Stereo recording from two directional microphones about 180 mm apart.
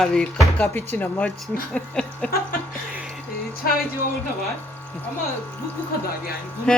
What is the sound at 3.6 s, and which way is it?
Speech, 60° left (ahead or behind).